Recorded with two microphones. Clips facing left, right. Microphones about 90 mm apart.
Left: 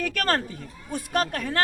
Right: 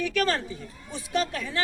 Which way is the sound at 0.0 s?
50° left (ahead or behind).